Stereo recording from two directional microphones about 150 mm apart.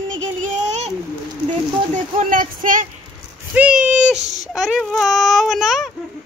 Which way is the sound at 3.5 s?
10° right (ahead or behind).